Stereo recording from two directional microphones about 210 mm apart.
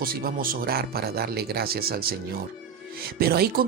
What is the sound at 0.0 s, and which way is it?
Speech, 45° right (ahead or behind).